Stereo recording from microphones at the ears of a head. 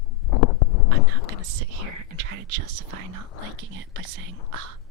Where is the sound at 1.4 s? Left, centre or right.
Right.